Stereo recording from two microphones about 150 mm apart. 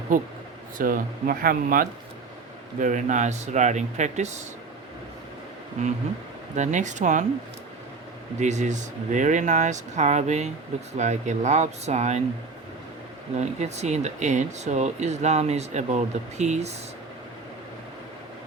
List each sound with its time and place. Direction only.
0.1 s speech: 65° right (ahead or behind)
2.8 s speech: 55° right (ahead or behind)
5.8 s speech: 50° right (ahead or behind)
8.4 s speech: 50° right (ahead or behind)
13.4 s speech: 50° right (ahead or behind)